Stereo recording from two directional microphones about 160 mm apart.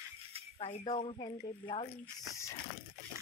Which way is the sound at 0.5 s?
35° left (ahead or behind).